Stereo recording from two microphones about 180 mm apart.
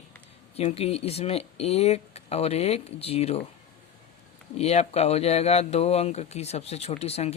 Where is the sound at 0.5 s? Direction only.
35° left (ahead or behind).